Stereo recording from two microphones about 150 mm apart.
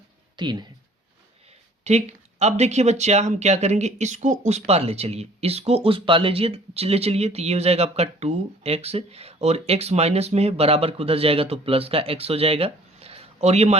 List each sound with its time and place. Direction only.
0.3 s speech: 30° right (ahead or behind)
1.8 s speech: 45° right (ahead or behind)